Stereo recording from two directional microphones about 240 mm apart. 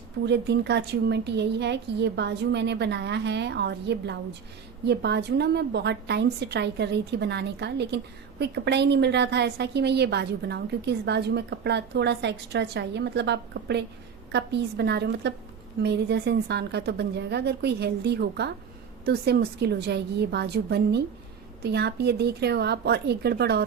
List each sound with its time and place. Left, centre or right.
0.3 s a woman's voice: right